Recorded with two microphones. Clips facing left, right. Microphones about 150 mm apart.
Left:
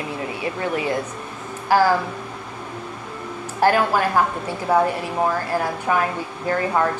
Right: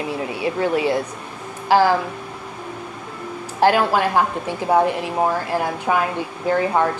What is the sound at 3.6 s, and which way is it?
A woman's voice, 15° right (ahead or behind).